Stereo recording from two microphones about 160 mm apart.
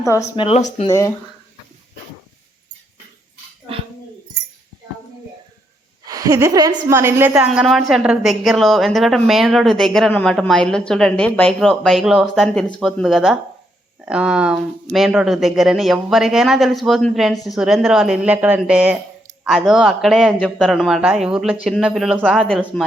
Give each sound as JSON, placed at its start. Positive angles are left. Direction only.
{"t": 0.3, "sound": "speech", "side_deg": 40}
{"t": 0.9, "sound": "speech", "side_deg": 20}
{"t": 6.1, "sound": "a woman's voice", "side_deg": -20}
{"t": 22.4, "sound": "a woman's voice", "side_deg": 5}